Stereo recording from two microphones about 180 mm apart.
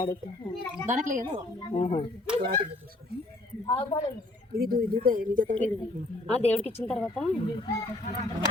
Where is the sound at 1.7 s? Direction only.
35° left (ahead or behind).